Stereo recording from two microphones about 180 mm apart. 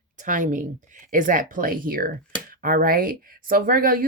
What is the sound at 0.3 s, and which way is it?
Speech, 45° right (ahead or behind).